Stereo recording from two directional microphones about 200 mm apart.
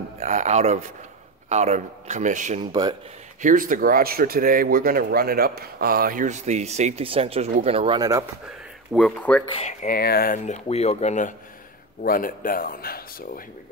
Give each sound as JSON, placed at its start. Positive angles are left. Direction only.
{"t": 0.2, "sound": "speech", "side_deg": -35}
{"t": 2.6, "sound": "speech", "side_deg": -20}
{"t": 3.4, "sound": "a man's voice", "side_deg": -40}
{"t": 8.9, "sound": "speech", "side_deg": 5}
{"t": 9.5, "sound": "speech", "side_deg": 30}